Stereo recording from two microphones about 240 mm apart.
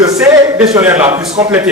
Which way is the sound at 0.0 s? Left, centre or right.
Centre.